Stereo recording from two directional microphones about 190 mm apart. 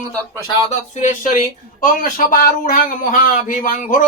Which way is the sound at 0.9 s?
40° left (ahead or behind).